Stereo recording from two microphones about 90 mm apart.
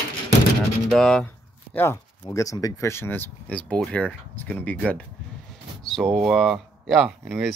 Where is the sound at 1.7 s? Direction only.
25° left (ahead or behind).